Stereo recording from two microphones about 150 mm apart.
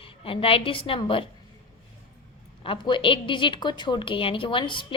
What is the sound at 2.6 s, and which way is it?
A woman's voice, 35° left (ahead or behind).